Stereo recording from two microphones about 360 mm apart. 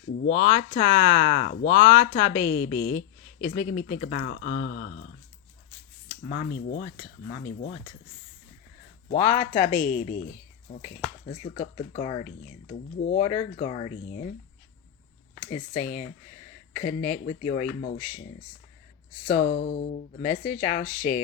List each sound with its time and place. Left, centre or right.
0.3 s speech: centre
6.2 s speech: left
9.0 s speech: centre
15.4 s speech: centre
19.3 s speech: left